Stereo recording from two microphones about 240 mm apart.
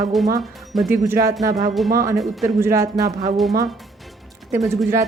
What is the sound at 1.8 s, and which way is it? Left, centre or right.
Speech, centre.